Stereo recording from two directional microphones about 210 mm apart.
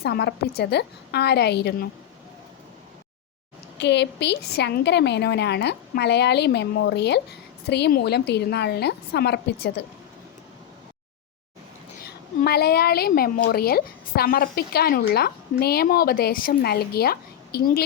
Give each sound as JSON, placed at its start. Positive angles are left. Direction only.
{"t": 0.0, "sound": "a woman's voice", "side_deg": 50}
{"t": 3.8, "sound": "a woman's voice", "side_deg": 55}
{"t": 12.0, "sound": "a woman's voice", "side_deg": 50}